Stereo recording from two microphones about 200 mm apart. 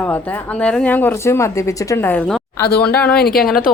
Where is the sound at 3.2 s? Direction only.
50° left (ahead or behind).